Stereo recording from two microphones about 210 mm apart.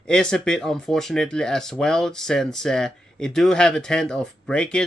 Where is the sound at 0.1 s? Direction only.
5° left (ahead or behind).